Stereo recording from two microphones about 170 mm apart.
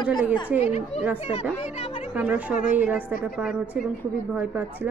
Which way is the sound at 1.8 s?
45° left (ahead or behind).